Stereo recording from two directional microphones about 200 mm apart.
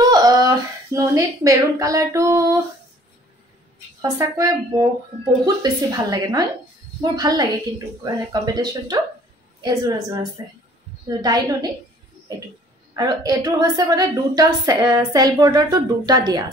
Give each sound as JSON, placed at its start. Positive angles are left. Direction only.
{"t": 0.0, "sound": "a sound", "side_deg": -20}
{"t": 0.9, "sound": "speech", "side_deg": -15}
{"t": 4.0, "sound": "a woman's voice", "side_deg": -15}
{"t": 11.1, "sound": "a woman's voice", "side_deg": -20}
{"t": 12.9, "sound": "a woman's voice", "side_deg": -20}